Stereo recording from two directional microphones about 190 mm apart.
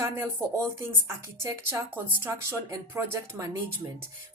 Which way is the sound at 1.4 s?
15° right (ahead or behind).